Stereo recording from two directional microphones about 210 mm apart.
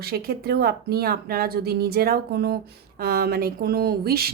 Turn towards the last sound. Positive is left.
turn(degrees=-45)  # may be behind; listen again after turning